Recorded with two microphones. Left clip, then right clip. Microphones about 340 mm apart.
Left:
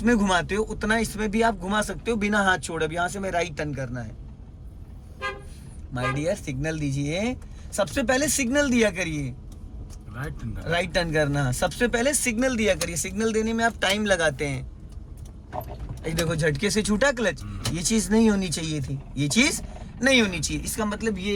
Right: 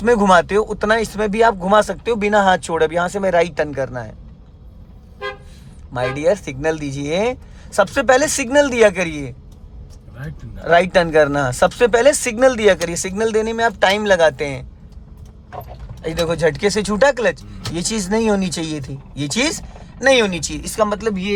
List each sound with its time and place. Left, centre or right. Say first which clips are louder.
0.0 s speech: right 10 dB; centre
5.9 s speech: right 9 dB; centre
16.0 s speech: right 8 dB; centre